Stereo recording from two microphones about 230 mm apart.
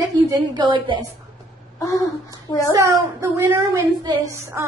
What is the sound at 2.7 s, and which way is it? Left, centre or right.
A woman's voice, centre.